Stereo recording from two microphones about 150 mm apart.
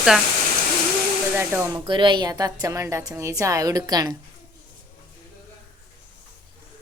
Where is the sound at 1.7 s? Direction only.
35° right (ahead or behind).